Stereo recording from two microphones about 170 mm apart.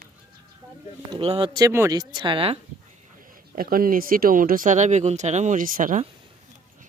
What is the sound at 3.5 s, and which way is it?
Speech, 55° right (ahead or behind).